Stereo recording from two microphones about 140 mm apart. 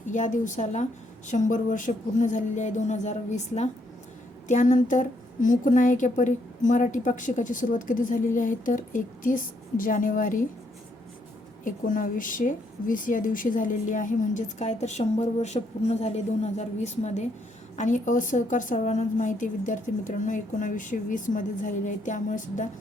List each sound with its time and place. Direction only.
0.1 s a woman's voice: 65° left (ahead or behind)
11.6 s a woman's voice: 75° left (ahead or behind)